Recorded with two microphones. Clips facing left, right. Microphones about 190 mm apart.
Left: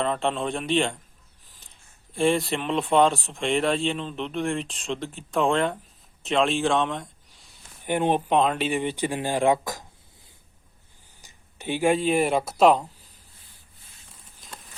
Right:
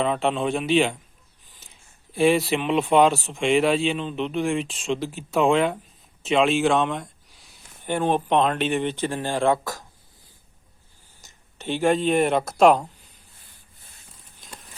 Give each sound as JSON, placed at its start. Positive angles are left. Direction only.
{"t": 0.0, "sound": "speech", "side_deg": -5}
{"t": 1.5, "sound": "a sound", "side_deg": 0}
{"t": 2.1, "sound": "speech", "side_deg": -5}
{"t": 7.9, "sound": "speech", "side_deg": 15}
{"t": 8.3, "sound": "speech", "side_deg": 5}
{"t": 11.2, "sound": "speech", "side_deg": 10}
{"t": 14.4, "sound": "a sound", "side_deg": 0}